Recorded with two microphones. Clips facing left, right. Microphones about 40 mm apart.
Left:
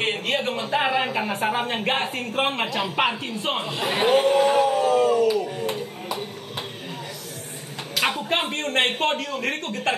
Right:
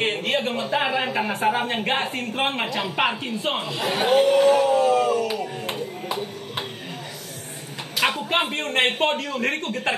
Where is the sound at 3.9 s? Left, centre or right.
Left.